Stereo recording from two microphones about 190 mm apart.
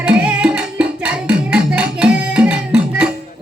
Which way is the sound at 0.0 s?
5° right (ahead or behind).